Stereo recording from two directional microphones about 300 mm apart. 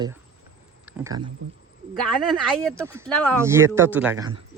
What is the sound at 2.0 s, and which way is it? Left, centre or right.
Speech, centre.